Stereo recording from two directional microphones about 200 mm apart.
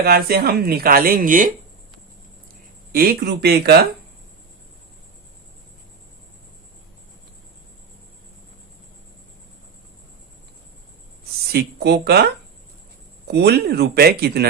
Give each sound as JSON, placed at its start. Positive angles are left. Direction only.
{"t": 0.0, "sound": "speech", "side_deg": -50}
{"t": 2.9, "sound": "speech", "side_deg": -45}
{"t": 11.2, "sound": "speech", "side_deg": -55}
{"t": 13.2, "sound": "speech", "side_deg": -55}